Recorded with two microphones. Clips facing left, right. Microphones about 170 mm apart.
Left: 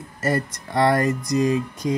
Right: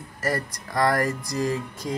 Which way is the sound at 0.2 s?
25° left (ahead or behind).